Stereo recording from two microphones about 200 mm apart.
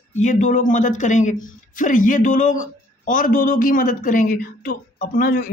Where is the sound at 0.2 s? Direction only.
40° left (ahead or behind).